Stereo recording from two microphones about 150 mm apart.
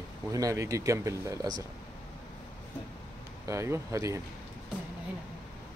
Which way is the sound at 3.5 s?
20° right (ahead or behind).